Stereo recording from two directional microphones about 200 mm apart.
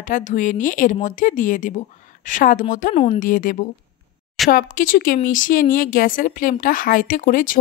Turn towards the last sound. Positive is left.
turn(degrees=40)  # may be behind; listen again after turning